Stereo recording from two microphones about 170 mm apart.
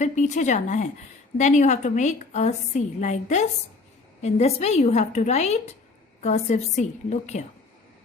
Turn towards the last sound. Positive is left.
turn(degrees=45)  # may be behind; listen again after turning